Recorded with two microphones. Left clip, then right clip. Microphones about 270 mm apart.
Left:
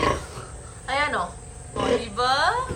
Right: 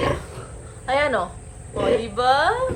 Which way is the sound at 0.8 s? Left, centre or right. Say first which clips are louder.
Right 4 dB; centre.